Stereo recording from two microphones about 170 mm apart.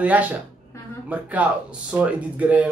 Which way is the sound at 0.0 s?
10° right (ahead or behind).